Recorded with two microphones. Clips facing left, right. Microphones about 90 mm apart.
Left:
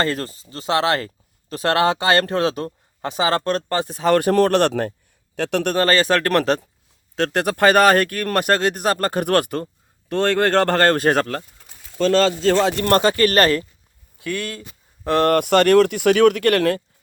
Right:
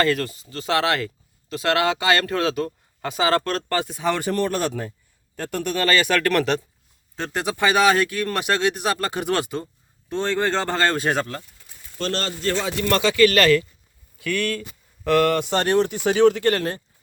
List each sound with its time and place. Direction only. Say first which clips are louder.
0.0 s speech: right 1 dB; 30° left (ahead or behind)
4.0 s speech: left 9 dB; 55° left (ahead or behind)
5.4 s speech: left 6 dB; 85° left
5.7 s speech: left 2 dB; 35° left (ahead or behind)
7.3 s speech: left 4 dB; 55° left (ahead or behind)
10.1 s speech: left 5 dB; 65° left (ahead or behind)
12.4 s speech: left 7 dB; 85° left
12.7 s speech: left 4 dB; 45° left (ahead or behind)
14.2 s speech: right 2 dB; 25° left (ahead or behind)
14.6 s a sound: right 1 dB; 30° left (ahead or behind)
15.3 s speech: left 6 dB; 60° left (ahead or behind)